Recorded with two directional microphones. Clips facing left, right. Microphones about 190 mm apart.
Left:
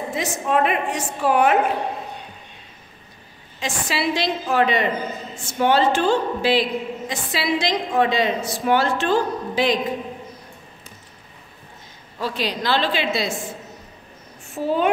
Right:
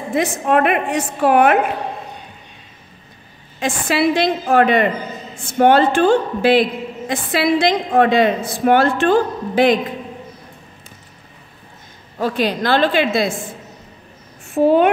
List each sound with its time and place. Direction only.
0.1 s a woman's voice: 60° right (ahead or behind)
3.5 s a woman's voice: 55° right (ahead or behind)
12.2 s a woman's voice: 50° right (ahead or behind)
14.5 s speech: 60° right (ahead or behind)